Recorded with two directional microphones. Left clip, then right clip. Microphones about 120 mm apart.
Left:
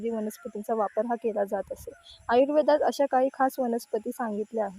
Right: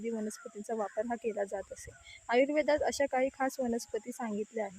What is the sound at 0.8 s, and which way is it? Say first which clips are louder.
A woman's voice: left 6 dB; 25° left (ahead or behind).